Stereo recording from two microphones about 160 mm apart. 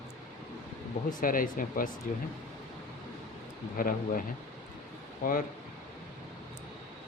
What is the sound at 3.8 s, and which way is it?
Speech, 60° left (ahead or behind).